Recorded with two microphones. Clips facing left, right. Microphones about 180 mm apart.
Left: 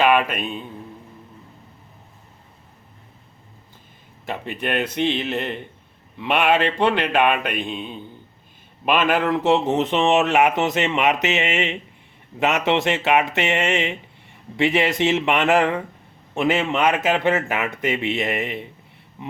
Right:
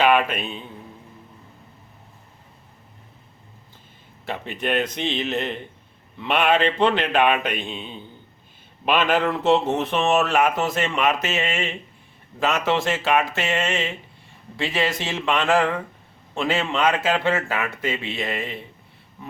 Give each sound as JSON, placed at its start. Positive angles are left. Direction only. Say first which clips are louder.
{"t": 0.3, "sound": "a man's voice", "louder": "left 2 dB", "side_deg": 0}
{"t": 4.6, "sound": "a man's voice", "louder": "left 2 dB", "side_deg": 10}